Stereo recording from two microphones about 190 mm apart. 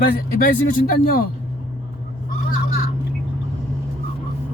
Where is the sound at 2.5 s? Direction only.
50° left (ahead or behind).